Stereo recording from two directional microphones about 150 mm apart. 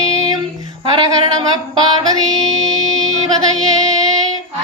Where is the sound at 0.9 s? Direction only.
30° right (ahead or behind).